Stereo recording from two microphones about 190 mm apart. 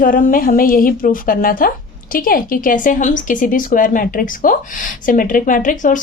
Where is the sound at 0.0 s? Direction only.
45° left (ahead or behind).